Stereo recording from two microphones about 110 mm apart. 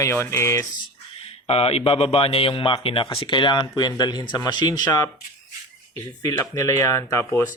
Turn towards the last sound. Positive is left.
turn(degrees=25)  # may be behind; listen again after turning